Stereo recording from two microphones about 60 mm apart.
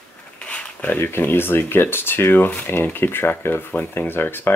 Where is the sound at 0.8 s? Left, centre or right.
Left.